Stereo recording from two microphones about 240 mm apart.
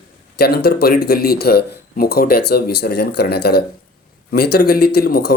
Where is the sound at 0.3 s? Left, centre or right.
Left.